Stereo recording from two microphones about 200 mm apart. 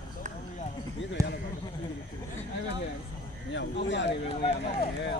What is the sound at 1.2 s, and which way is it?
Speech, 15° right (ahead or behind).